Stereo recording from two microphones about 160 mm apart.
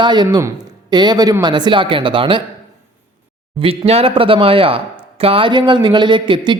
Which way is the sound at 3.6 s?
35° right (ahead or behind).